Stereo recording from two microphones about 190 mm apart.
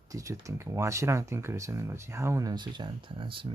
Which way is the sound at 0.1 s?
15° right (ahead or behind).